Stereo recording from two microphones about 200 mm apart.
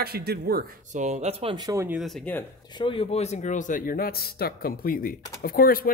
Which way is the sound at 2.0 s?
5° left (ahead or behind).